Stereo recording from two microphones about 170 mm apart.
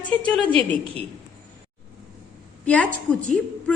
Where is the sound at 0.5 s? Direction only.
35° right (ahead or behind).